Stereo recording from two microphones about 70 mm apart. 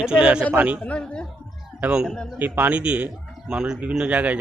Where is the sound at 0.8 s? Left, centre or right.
Centre.